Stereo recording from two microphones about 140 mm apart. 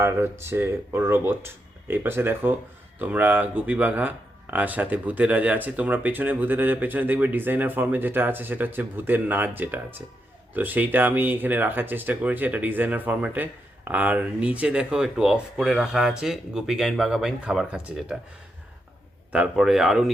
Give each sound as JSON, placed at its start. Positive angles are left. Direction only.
{"t": 0.0, "sound": "speech", "side_deg": -20}
{"t": 19.3, "sound": "speech", "side_deg": -5}